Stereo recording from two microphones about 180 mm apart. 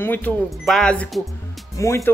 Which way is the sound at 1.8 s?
15° left (ahead or behind).